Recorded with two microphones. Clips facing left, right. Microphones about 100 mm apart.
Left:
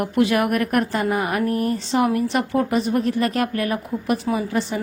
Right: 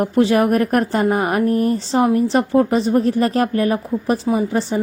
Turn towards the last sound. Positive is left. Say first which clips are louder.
# right 4 dB
turn(degrees=-30)  # may be behind; listen again after turning